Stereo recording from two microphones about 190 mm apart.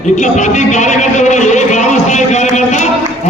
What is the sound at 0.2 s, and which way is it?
A man's voice, 40° left (ahead or behind).